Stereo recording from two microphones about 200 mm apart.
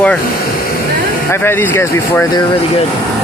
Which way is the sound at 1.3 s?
10° left (ahead or behind).